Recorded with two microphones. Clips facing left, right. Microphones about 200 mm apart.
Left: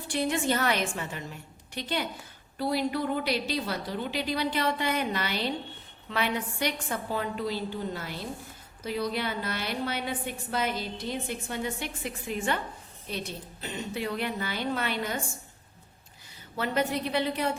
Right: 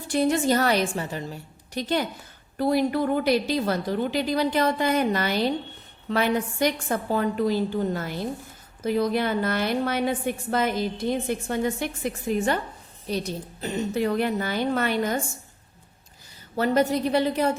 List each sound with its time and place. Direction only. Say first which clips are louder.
0.1 s a woman's voice: right 6 dB; 45° right (ahead or behind)
16.6 s a woman's voice: right 7 dB; 40° right (ahead or behind)